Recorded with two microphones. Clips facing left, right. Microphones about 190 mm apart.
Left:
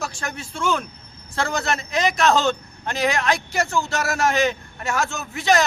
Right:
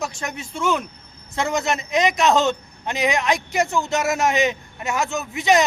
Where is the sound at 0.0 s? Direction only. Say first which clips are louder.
Right 2 dB; 20° right (ahead or behind).